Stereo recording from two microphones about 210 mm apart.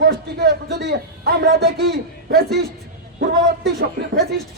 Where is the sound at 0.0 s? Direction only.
50° right (ahead or behind).